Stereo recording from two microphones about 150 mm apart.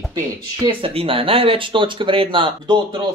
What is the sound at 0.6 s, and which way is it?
Speech, 35° right (ahead or behind).